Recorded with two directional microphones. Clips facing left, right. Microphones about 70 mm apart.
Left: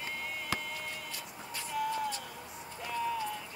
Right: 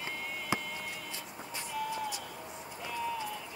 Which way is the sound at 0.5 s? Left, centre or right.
Right.